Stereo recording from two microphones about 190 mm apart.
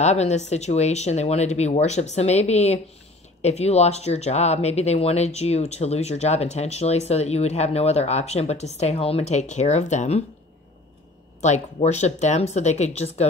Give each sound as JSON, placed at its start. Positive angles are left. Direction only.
{"t": 0.0, "sound": "speech", "side_deg": 35}
{"t": 11.4, "sound": "speech", "side_deg": 35}